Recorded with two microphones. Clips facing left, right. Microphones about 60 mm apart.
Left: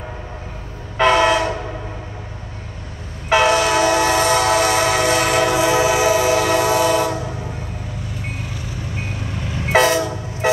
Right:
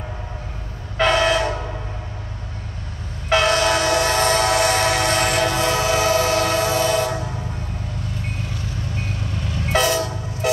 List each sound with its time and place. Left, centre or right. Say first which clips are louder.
0.9 s train: left 3 dB; centre
3.3 s train: left 2 dB; centre
9.9 s train: left 3 dB; centre